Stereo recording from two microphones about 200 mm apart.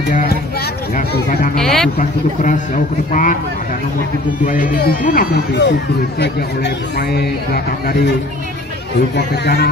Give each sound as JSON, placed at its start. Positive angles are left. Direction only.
{"t": 0.9, "sound": "speech", "side_deg": 40}
{"t": 1.6, "sound": "speech", "side_deg": 0}
{"t": 2.0, "sound": "a man's voice", "side_deg": 40}
{"t": 4.5, "sound": "speech", "side_deg": 45}
{"t": 9.1, "sound": "speech", "side_deg": 55}